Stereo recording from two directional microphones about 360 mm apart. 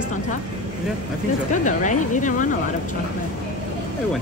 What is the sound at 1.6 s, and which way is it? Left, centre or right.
Speech, left.